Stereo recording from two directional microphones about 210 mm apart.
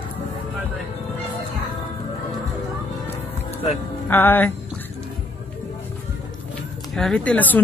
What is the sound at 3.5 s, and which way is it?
Music, 30° left (ahead or behind).